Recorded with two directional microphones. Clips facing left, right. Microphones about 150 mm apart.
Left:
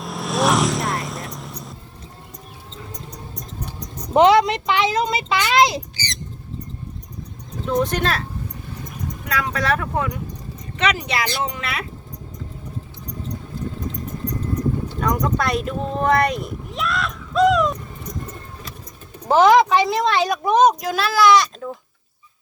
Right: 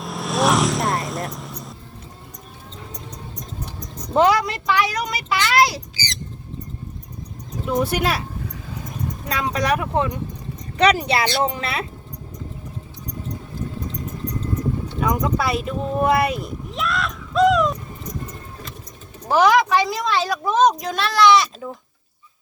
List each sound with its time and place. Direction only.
0.0 s vehicle: centre (ahead or behind)
4.1 s speech: 20° left (ahead or behind)
7.6 s speech: 10° right (ahead or behind)
9.2 s speech: 25° right (ahead or behind)
10.8 s speech: 35° right (ahead or behind)
15.0 s speech: 5° right (ahead or behind)
19.3 s speech: 20° left (ahead or behind)
20.7 s speech: 5° left (ahead or behind)